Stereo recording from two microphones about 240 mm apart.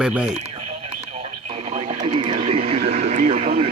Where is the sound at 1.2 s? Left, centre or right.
Right.